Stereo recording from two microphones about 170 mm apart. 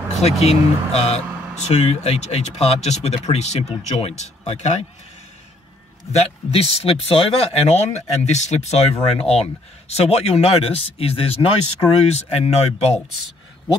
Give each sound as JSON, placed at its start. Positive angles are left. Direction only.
{"t": 0.2, "sound": "speech", "side_deg": 40}
{"t": 6.1, "sound": "speech", "side_deg": 35}